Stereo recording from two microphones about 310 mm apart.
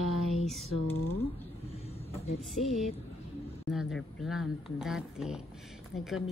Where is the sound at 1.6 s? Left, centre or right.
Centre.